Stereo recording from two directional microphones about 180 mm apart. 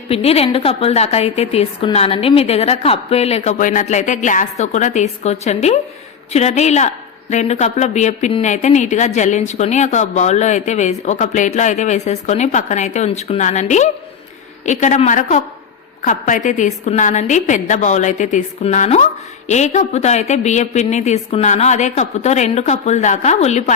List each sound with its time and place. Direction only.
0.1 s a woman's voice: 35° left (ahead or behind)